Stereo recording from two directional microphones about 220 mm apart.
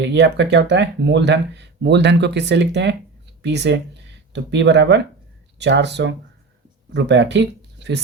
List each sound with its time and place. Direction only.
0.0 s speech: 50° right (ahead or behind)